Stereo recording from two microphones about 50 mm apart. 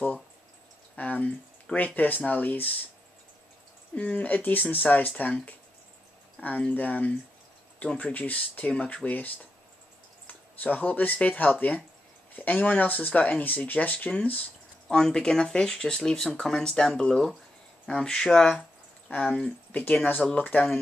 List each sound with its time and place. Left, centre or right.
0.9 s a sound: left
2.0 s speech: left
3.9 s speech: left
7.8 s speech: left
8.1 s speech: left
14.9 s speech: centre
18.6 s a sound: left
19.2 s speech: centre
20.2 s speech: centre